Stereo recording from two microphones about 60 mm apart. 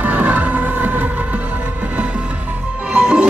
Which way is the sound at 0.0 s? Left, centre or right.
Right.